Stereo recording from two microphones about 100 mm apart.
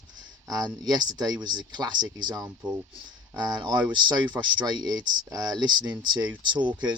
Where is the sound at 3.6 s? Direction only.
50° right (ahead or behind).